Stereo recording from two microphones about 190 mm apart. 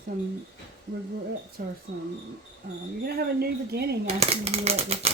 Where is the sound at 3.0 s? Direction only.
55° right (ahead or behind).